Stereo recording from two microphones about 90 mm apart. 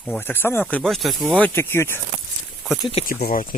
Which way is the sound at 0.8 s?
Centre (ahead or behind).